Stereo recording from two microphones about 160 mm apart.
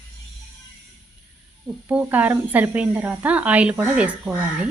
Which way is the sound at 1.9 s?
10° right (ahead or behind).